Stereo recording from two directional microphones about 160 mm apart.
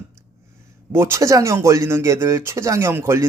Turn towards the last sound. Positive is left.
turn(degrees=-15)  # may be behind; listen again after turning